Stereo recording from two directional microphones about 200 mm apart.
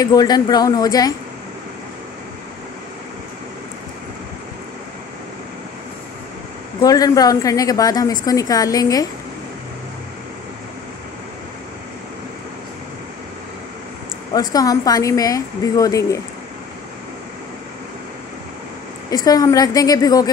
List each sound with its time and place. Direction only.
0.0 s speech: 20° left (ahead or behind)
6.8 s a woman's voice: 20° left (ahead or behind)
14.3 s a woman's voice: 20° left (ahead or behind)
19.2 s a woman's voice: 20° left (ahead or behind)